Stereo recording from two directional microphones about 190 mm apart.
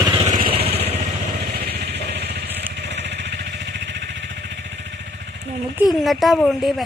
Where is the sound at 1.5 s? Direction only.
55° right (ahead or behind).